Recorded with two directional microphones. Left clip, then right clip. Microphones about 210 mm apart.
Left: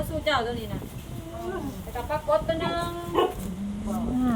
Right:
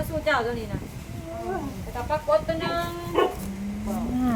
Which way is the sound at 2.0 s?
5° right (ahead or behind).